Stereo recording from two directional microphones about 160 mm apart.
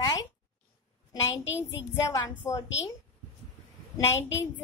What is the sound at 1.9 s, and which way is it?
Speech, 20° left (ahead or behind).